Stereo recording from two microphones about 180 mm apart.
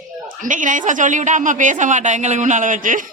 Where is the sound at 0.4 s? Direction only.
45° right (ahead or behind).